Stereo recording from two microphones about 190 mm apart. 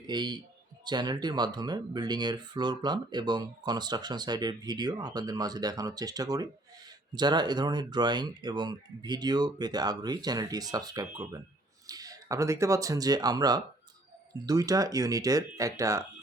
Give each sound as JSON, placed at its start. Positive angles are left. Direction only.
{"t": 0.1, "sound": "speech", "side_deg": -25}